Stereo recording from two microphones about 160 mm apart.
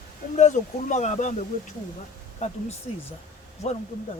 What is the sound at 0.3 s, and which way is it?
Speech, 50° left (ahead or behind).